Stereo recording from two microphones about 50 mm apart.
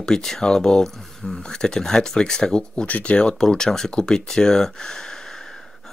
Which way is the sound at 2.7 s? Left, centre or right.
Left.